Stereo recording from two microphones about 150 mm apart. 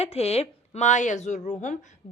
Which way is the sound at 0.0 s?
45° left (ahead or behind).